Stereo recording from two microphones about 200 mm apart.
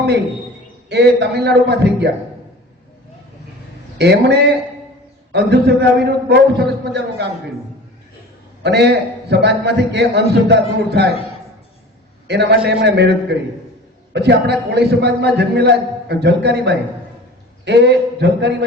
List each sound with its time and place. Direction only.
0.9 s a man's voice: 55° right (ahead or behind)
3.9 s a man's voice: 55° right (ahead or behind)
8.6 s a man's voice: 55° right (ahead or behind)
12.3 s a man's voice: 55° right (ahead or behind)